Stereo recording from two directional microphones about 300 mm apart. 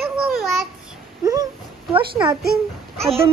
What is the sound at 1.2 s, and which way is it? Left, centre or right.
Speech, centre.